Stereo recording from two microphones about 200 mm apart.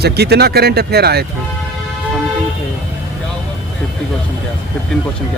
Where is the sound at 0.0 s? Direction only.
55° right (ahead or behind).